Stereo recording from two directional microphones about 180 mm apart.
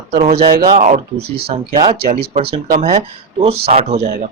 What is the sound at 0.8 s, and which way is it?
Speech, 40° right (ahead or behind).